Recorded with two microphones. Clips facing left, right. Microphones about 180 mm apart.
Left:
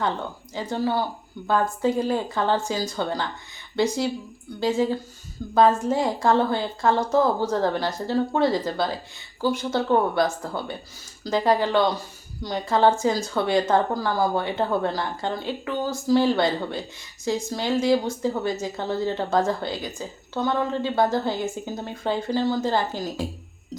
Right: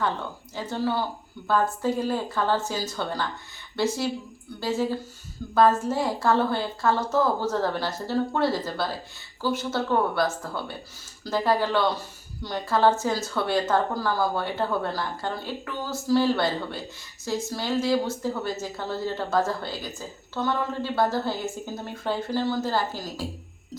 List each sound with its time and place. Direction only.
0.5 s a woman's voice: 15° left (ahead or behind)
4.6 s a woman's voice: 15° left (ahead or behind)